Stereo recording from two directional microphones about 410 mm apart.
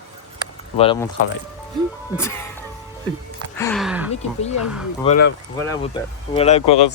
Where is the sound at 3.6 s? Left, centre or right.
Centre.